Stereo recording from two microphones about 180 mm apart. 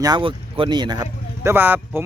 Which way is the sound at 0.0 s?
25° right (ahead or behind).